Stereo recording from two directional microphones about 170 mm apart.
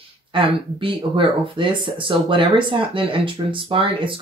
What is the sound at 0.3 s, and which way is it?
Speech, 30° right (ahead or behind).